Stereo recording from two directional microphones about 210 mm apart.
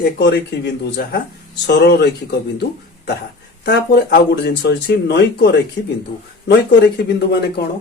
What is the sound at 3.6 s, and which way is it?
Speech, 55° left (ahead or behind).